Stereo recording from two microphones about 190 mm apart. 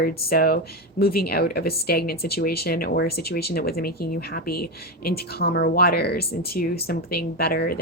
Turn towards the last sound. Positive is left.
turn(degrees=55)  # may be behind; listen again after turning